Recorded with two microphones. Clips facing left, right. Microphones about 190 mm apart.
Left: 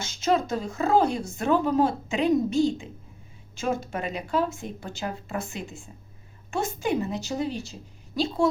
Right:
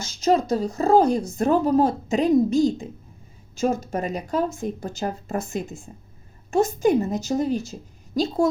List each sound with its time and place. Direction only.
0.0 s a woman's voice: 40° right (ahead or behind)